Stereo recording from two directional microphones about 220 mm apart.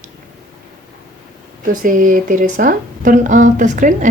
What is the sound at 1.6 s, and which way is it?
Speech, 40° right (ahead or behind).